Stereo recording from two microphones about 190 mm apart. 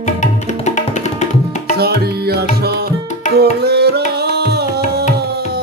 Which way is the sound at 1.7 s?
55° right (ahead or behind).